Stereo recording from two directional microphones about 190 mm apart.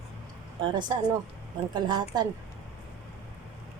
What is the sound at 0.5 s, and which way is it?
A woman's voice, 25° right (ahead or behind).